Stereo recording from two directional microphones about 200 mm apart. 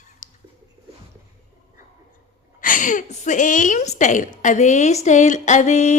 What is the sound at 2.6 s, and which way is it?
A woman's voice, 40° left (ahead or behind).